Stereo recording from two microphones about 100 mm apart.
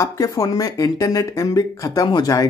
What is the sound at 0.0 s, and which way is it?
Speech, 35° left (ahead or behind).